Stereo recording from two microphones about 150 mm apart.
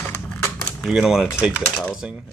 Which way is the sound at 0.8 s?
5° right (ahead or behind).